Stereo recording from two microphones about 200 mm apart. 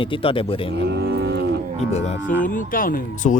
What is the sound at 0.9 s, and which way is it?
Cattle, 55° right (ahead or behind).